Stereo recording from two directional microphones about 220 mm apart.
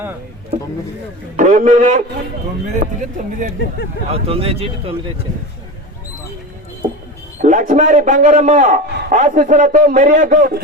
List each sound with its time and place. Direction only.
1.4 s a man's voice: 35° right (ahead or behind)
7.4 s a man's voice: 35° right (ahead or behind)